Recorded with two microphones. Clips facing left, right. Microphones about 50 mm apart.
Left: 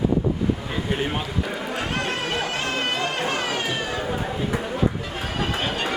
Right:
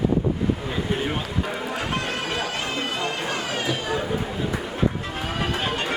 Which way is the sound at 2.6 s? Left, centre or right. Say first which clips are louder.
Left 2 dB; left.